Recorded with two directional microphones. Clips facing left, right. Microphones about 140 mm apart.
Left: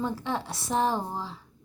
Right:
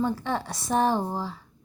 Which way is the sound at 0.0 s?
Centre (ahead or behind).